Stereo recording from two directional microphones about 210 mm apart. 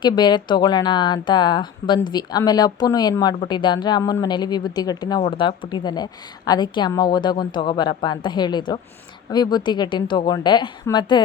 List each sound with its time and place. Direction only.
0.0 s a woman's voice: 20° left (ahead or behind)